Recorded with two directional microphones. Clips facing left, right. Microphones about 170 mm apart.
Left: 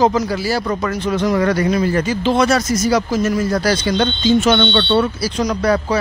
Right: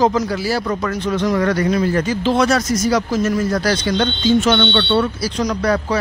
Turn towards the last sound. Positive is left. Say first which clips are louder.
# left 1 dB
turn(degrees=10)  # may be behind; listen again after turning